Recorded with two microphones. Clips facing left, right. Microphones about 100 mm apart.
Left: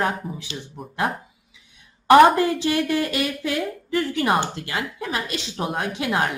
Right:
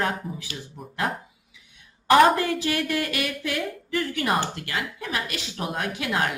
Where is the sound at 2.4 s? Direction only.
25° left (ahead or behind).